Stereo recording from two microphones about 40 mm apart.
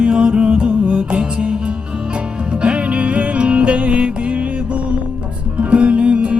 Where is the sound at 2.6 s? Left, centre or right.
Right.